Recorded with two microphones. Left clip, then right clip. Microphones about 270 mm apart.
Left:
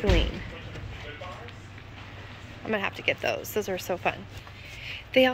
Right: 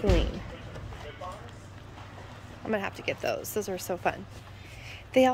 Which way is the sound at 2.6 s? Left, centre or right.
Centre.